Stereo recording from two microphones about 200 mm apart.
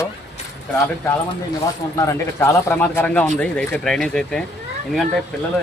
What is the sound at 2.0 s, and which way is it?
Speech, 15° left (ahead or behind).